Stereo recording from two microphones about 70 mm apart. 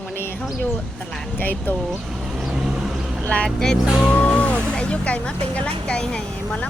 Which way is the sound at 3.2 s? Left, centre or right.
Centre.